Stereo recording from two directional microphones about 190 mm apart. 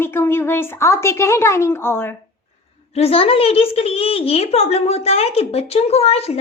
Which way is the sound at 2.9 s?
30° left (ahead or behind).